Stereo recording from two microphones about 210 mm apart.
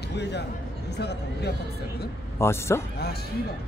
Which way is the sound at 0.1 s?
55° left (ahead or behind).